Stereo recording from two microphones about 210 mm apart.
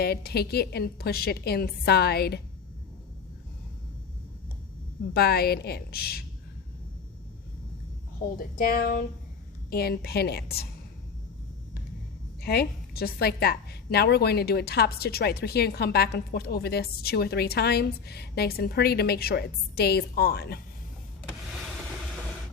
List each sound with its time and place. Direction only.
0.0 s a woman's voice: 50° left (ahead or behind)
5.1 s a woman's voice: 50° left (ahead or behind)
8.4 s a woman's voice: 45° left (ahead or behind)
12.4 s a woman's voice: 50° left (ahead or behind)